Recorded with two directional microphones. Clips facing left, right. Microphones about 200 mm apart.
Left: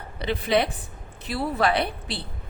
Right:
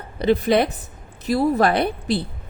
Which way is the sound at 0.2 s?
45° right (ahead or behind).